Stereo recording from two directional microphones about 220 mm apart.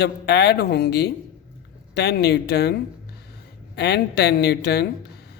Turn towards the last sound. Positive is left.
turn(degrees=45)  # may be behind; listen again after turning